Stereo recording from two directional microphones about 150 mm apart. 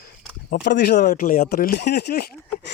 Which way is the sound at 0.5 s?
90° left.